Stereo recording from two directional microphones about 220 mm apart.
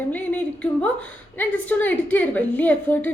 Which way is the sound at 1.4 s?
10° left (ahead or behind).